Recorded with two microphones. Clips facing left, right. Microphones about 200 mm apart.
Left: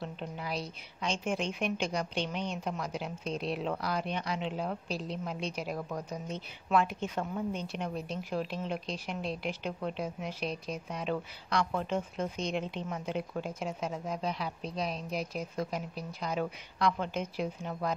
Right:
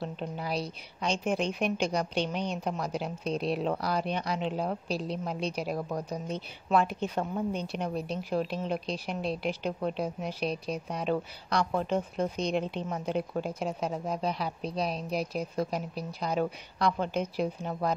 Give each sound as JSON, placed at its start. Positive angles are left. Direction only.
{"t": 0.0, "sound": "a woman's voice", "side_deg": -35}